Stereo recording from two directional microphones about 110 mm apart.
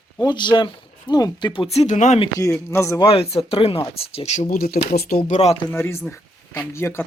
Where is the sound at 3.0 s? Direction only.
65° left (ahead or behind); by 4.4 s 80° left.